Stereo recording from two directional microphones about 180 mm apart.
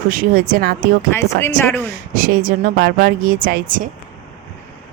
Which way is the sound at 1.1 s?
15° left (ahead or behind).